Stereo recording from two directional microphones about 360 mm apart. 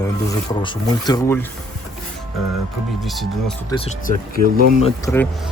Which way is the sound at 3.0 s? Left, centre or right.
Centre.